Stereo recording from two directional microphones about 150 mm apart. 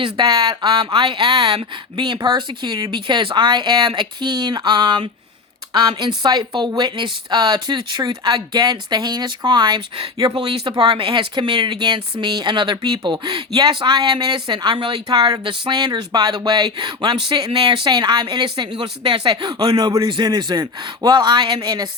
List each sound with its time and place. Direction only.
0.0 s speech: 35° right (ahead or behind)